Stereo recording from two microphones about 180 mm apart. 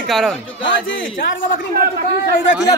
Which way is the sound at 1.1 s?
50° left (ahead or behind).